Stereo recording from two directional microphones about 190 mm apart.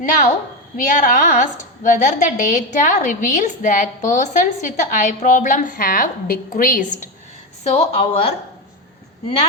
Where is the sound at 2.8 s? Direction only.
45° left (ahead or behind).